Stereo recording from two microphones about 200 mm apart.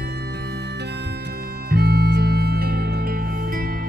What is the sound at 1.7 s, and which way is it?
Music, 50° right (ahead or behind).